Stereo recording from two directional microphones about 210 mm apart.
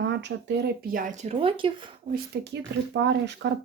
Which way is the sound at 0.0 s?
55° right (ahead or behind).